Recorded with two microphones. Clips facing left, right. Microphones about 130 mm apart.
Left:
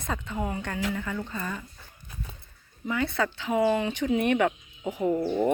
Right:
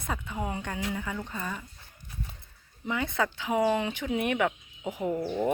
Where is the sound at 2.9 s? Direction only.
15° right (ahead or behind).